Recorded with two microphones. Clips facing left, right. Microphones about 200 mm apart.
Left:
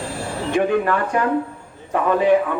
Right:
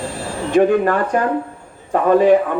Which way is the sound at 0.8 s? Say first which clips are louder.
Right 3 dB; 40° right (ahead or behind).